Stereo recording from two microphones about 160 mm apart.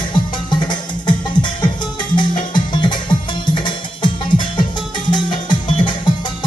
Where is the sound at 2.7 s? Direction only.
30° left (ahead or behind).